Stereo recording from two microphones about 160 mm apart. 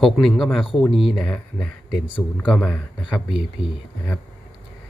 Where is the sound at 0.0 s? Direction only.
Centre (ahead or behind).